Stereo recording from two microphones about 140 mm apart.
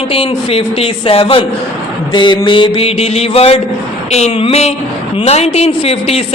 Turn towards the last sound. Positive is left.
turn(degrees=45)  # may be behind; listen again after turning